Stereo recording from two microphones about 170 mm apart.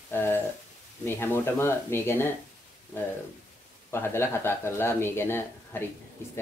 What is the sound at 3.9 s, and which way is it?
Speech, 15° left (ahead or behind).